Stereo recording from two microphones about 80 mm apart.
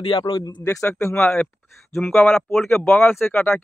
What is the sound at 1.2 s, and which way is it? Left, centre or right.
Speech, centre.